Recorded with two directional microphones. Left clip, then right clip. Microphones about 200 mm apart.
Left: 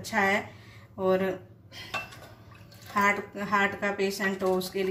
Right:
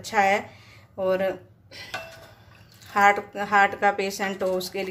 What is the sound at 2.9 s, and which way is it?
A woman's voice, 50° right (ahead or behind).